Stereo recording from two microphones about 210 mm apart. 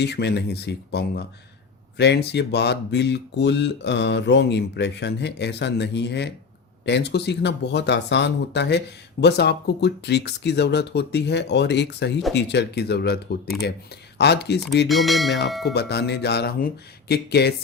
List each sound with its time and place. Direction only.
0.0 s speech: 55° left (ahead or behind)
14.2 s speech: 50° left (ahead or behind)
14.8 s speech: centre (ahead or behind)
15.6 s speech: 50° left (ahead or behind)